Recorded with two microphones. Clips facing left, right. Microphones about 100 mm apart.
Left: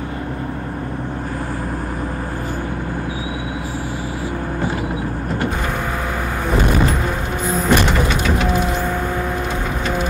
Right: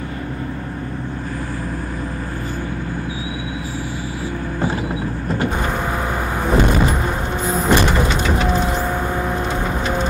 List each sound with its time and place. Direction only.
5.6 s vehicle: 10° right (ahead or behind)
6.8 s music: 10° right (ahead or behind)
7.6 s sliding door: 15° right (ahead or behind)
8.3 s music: 15° right (ahead or behind)
8.7 s a sound: 10° right (ahead or behind)
9.3 s vehicle: 20° right (ahead or behind)